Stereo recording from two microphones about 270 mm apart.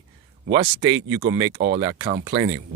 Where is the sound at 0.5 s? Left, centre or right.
Centre.